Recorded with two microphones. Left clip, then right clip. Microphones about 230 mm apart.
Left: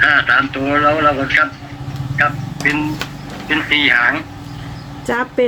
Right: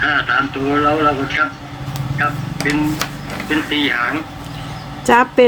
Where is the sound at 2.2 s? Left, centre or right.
Left.